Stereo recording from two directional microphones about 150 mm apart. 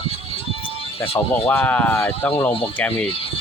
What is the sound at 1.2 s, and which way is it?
Speech, 25° left (ahead or behind).